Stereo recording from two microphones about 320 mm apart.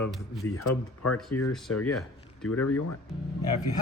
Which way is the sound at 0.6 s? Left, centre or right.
Left.